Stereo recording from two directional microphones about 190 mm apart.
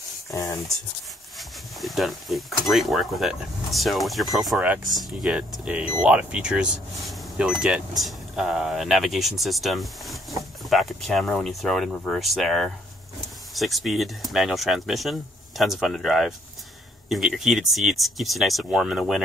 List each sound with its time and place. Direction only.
0.3 s speech: 15° left (ahead or behind)
1.8 s speech: centre (ahead or behind)